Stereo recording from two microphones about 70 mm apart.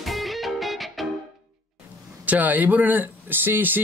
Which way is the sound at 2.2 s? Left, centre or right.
Right.